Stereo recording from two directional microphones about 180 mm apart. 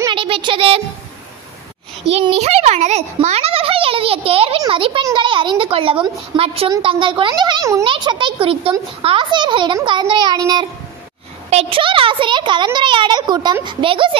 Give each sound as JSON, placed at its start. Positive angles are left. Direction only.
{"t": 0.0, "sound": "music", "side_deg": -30}
{"t": 2.1, "sound": "a child's voice", "side_deg": -35}